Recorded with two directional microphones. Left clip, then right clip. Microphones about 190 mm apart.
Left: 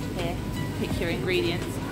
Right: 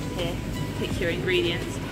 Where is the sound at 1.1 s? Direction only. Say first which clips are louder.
Right 2 dB; 55° left (ahead or behind).